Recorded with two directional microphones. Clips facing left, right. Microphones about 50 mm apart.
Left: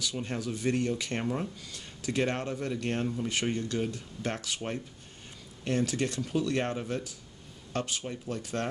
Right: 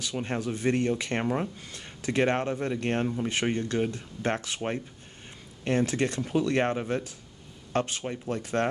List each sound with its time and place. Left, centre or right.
0.0 s speech: right